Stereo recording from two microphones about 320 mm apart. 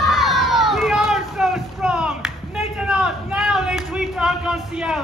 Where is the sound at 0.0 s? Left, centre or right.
Centre.